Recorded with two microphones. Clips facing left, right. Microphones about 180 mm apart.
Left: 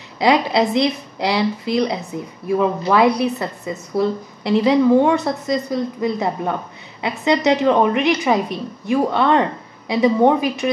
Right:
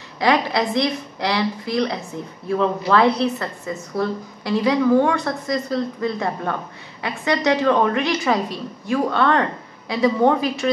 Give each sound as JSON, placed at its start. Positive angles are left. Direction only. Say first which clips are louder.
{"t": 0.2, "sound": "a woman's voice", "louder": "left 3 dB", "side_deg": 20}